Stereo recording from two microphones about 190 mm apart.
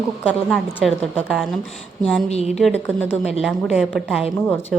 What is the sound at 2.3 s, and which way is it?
Speech, 35° left (ahead or behind).